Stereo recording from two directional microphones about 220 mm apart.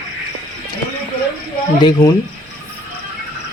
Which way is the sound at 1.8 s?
20° left (ahead or behind).